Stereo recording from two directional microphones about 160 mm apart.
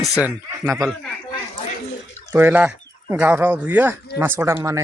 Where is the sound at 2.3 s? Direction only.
10° right (ahead or behind).